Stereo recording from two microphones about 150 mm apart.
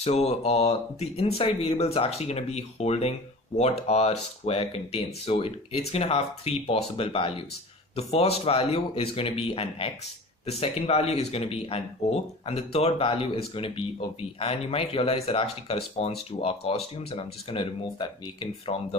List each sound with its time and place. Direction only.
0.0 s speech: 45° left (ahead or behind)